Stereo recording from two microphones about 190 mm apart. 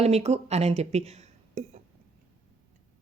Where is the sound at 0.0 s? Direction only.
35° right (ahead or behind).